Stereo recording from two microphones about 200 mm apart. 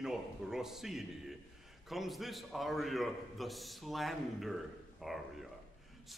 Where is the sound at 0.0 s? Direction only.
5° right (ahead or behind).